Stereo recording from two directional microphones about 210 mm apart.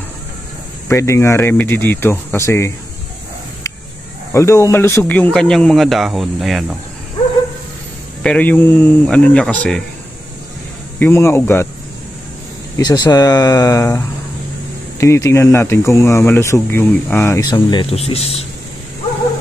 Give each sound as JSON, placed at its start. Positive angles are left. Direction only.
{"t": 0.8, "sound": "speech", "side_deg": 15}
{"t": 4.3, "sound": "speech", "side_deg": 15}
{"t": 8.2, "sound": "speech", "side_deg": 5}
{"t": 11.0, "sound": "speech", "side_deg": 10}
{"t": 12.7, "sound": "speech", "side_deg": 20}